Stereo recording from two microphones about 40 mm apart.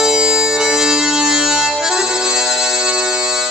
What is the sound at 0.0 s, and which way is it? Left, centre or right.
Music, centre.